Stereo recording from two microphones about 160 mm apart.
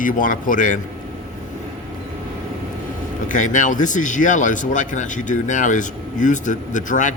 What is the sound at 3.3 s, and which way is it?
Speech, 50° left (ahead or behind).